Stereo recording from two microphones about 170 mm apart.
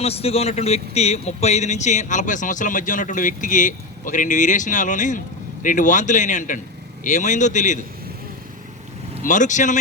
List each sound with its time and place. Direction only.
0.0 s speech: 35° left (ahead or behind)
9.2 s speech: 45° left (ahead or behind)